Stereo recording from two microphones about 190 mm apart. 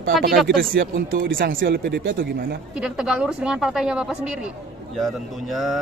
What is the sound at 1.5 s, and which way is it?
Speech, 50° right (ahead or behind).